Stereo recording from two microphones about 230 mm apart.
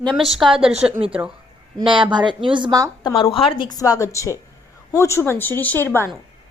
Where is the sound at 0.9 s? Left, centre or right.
Right.